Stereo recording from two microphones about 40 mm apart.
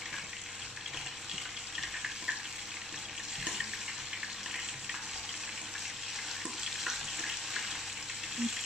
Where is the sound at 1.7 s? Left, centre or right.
Centre.